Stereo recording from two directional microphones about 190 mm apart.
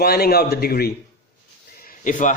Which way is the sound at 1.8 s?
40° left (ahead or behind).